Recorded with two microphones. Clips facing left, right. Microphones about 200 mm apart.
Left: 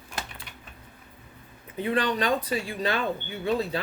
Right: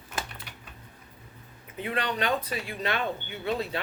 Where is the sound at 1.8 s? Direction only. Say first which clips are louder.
Left 4 dB; 35° left (ahead or behind).